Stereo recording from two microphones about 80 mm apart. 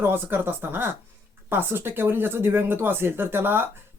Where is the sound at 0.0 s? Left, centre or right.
Right.